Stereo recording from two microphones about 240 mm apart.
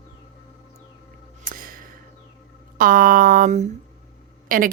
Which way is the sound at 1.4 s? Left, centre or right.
Right.